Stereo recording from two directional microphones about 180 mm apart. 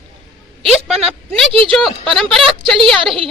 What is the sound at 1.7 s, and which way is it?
A woman's voice, centre (ahead or behind).